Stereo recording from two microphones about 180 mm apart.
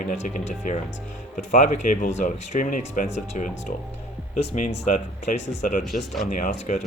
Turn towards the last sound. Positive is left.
turn(degrees=45)  # may be behind; listen again after turning